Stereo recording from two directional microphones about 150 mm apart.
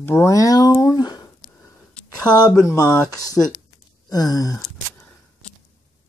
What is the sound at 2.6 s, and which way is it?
Speech, 25° left (ahead or behind).